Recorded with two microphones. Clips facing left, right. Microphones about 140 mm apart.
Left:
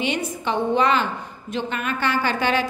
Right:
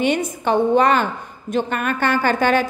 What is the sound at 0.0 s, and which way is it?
A woman's voice, 50° right (ahead or behind).